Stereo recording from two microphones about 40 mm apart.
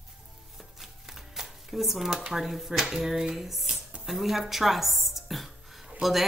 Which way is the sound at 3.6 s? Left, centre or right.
Right.